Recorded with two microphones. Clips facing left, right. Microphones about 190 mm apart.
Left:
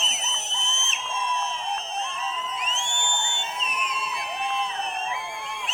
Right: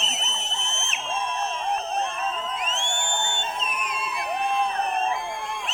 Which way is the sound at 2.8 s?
55° right (ahead or behind).